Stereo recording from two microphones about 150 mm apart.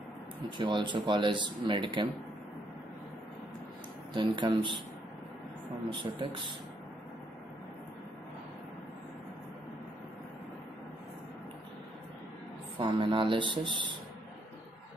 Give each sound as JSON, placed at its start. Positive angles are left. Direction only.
{"t": 0.6, "sound": "speech", "side_deg": -30}
{"t": 4.1, "sound": "speech", "side_deg": -30}
{"t": 5.9, "sound": "speech", "side_deg": -35}
{"t": 12.7, "sound": "speech", "side_deg": -35}